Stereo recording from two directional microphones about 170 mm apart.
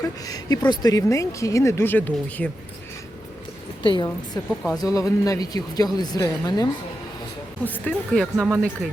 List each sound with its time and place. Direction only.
0.0 s speech: 20° left (ahead or behind)
3.8 s speech: 30° left (ahead or behind)
7.6 s speech: 10° left (ahead or behind)
8.4 s speech: 10° right (ahead or behind)